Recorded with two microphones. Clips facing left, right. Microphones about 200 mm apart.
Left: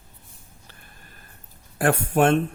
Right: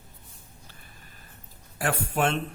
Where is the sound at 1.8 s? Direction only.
50° left (ahead or behind).